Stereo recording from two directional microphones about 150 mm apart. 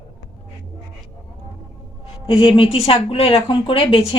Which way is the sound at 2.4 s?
35° left (ahead or behind).